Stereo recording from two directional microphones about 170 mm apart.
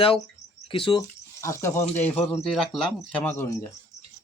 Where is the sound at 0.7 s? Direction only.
30° left (ahead or behind).